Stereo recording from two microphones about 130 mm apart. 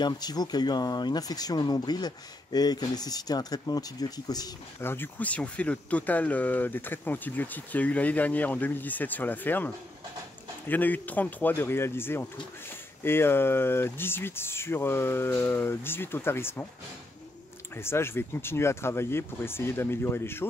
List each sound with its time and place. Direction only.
0.0 s speech: 30° left (ahead or behind)
4.8 s speech: 15° left (ahead or behind)
10.7 s speech: 15° left (ahead or behind)
17.7 s speech: 20° left (ahead or behind)